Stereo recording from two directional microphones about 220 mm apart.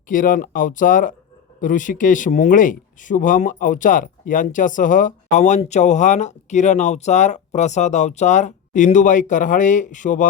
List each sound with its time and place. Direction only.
0.1 s speech: 40° left (ahead or behind)